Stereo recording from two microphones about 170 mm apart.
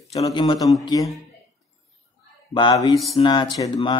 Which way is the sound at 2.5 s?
25° left (ahead or behind).